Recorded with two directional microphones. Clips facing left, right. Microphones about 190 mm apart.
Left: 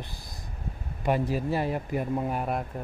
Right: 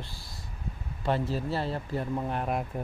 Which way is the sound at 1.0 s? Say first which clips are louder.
Left 3 dB; 15° left (ahead or behind).